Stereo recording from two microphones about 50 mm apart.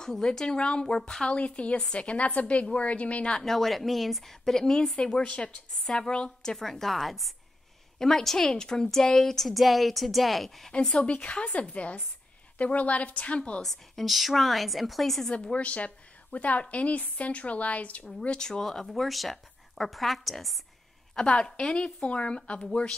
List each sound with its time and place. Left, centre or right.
0.0 s a woman's voice: centre; by 3.3 s left
3.3 s a woman's voice: centre
10.7 s a woman's voice: centre
13.6 s a woman's voice: centre
15.3 s a woman's voice: left
18.5 s a woman's voice: centre
21.1 s a woman's voice: centre